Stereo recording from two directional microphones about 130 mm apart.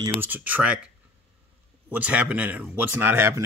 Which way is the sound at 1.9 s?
10° right (ahead or behind).